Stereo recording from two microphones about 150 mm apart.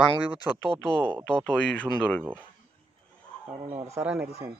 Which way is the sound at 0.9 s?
15° right (ahead or behind).